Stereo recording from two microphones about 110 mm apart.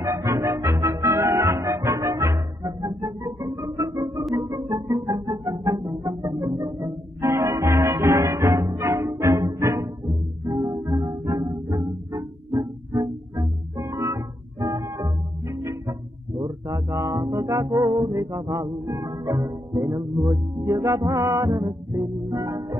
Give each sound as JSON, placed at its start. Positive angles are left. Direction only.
{"t": 0.0, "sound": "music", "side_deg": -25}
{"t": 3.0, "sound": "organ", "side_deg": -30}
{"t": 4.4, "sound": "music", "side_deg": -35}
{"t": 10.0, "sound": "music", "side_deg": -40}